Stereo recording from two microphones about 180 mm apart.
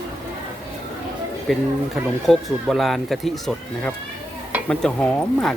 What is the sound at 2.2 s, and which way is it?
Speech, centre (ahead or behind).